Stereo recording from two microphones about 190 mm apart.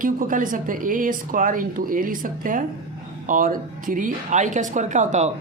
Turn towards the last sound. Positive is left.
turn(degrees=-40)  # may be behind; listen again after turning